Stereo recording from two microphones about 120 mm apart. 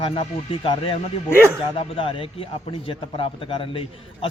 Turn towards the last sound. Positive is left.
turn(degrees=45)  # may be behind; listen again after turning